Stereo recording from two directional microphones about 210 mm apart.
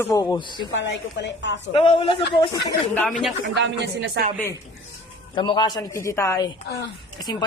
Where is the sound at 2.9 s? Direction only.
5° left (ahead or behind).